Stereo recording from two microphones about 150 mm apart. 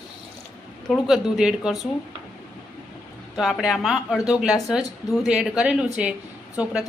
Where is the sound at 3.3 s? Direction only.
Centre (ahead or behind).